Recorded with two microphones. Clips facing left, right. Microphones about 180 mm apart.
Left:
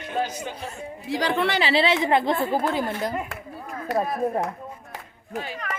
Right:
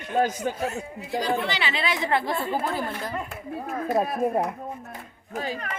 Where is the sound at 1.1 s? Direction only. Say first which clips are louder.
Left 3 dB; 85° left.